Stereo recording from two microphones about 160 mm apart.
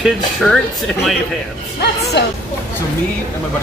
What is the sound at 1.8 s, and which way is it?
Speech, 90° left.